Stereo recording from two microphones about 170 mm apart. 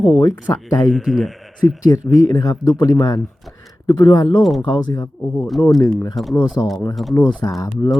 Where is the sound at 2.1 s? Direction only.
20° left (ahead or behind).